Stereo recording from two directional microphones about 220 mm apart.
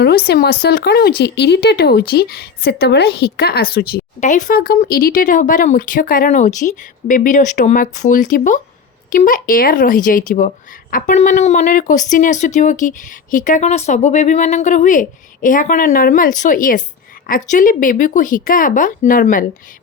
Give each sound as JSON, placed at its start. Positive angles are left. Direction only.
{"t": 0.0, "sound": "speech", "side_deg": 45}
{"t": 4.2, "sound": "speech", "side_deg": 35}